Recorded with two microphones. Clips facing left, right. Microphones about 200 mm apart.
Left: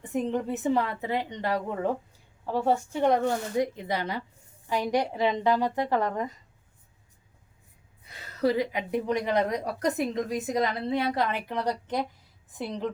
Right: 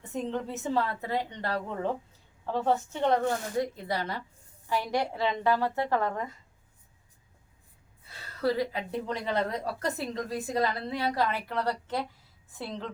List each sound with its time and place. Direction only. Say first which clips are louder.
0.1 s a woman's voice: left 4 dB; 15° left (ahead or behind)
8.0 s a woman's voice: left 3 dB; 20° left (ahead or behind)